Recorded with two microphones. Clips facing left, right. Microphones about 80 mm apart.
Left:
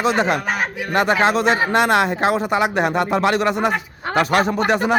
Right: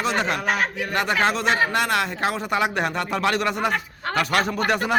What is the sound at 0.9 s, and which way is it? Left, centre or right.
Speech, left.